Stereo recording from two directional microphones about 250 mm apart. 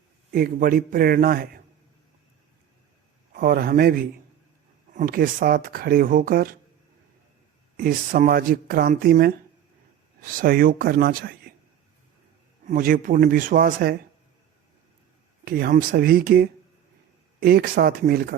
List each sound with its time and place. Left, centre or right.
0.3 s speech: right
3.3 s speech: right
7.8 s speech: right
12.6 s speech: right
15.4 s speech: right